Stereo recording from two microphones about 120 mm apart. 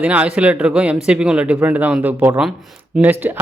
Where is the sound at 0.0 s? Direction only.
10° right (ahead or behind).